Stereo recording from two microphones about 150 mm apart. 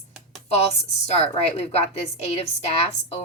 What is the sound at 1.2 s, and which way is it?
A woman's voice, 45° left (ahead or behind).